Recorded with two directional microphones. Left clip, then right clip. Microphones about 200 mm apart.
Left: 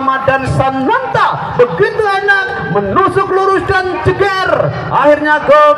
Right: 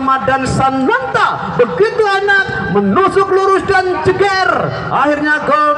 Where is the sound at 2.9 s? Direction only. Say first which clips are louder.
Even; 45° right (ahead or behind).